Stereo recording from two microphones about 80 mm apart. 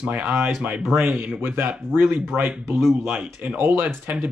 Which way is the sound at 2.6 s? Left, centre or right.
Centre.